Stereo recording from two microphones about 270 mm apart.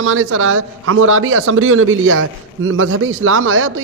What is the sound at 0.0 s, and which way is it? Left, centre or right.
A man's voice, right.